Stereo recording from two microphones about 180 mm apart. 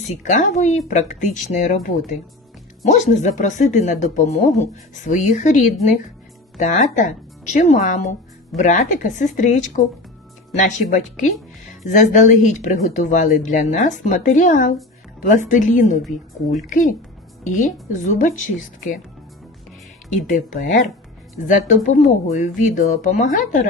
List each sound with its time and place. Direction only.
0.2 s speech: 45° left (ahead or behind)
6.6 s speech: 40° left (ahead or behind)
16.0 s a woman's voice: centre (ahead or behind)
16.6 s speech: 45° left (ahead or behind)
20.5 s speech: 45° left (ahead or behind)